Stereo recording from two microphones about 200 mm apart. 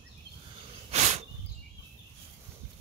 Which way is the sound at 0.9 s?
30° right (ahead or behind).